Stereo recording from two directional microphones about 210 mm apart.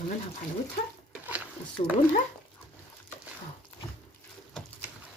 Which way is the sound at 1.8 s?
30° left (ahead or behind).